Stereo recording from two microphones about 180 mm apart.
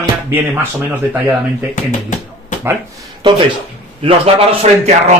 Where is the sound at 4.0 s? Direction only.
30° right (ahead or behind).